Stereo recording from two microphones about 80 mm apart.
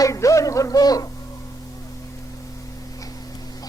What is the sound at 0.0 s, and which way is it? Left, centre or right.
A woman's voice, left.